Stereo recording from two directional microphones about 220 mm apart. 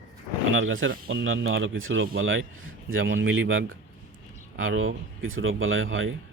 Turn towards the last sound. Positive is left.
turn(degrees=-65)  # may be behind; listen again after turning